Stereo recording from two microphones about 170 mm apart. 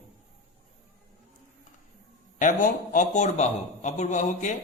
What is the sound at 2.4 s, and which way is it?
A man's voice, 50° left (ahead or behind).